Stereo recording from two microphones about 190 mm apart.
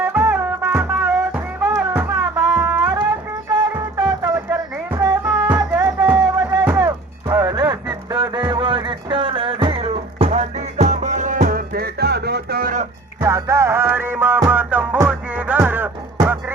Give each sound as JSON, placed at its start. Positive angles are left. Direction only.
{"t": 0.0, "sound": "music", "side_deg": -10}
{"t": 2.0, "sound": "music", "side_deg": -20}
{"t": 13.2, "sound": "music", "side_deg": -15}